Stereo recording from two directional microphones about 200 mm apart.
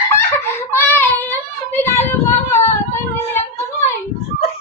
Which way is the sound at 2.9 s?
10° left (ahead or behind).